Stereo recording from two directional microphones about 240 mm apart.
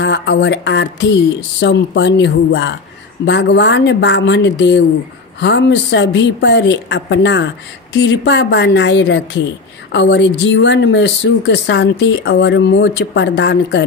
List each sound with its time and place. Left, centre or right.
0.0 s speech: left